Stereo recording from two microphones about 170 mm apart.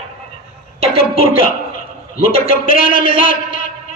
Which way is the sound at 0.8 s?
35° right (ahead or behind).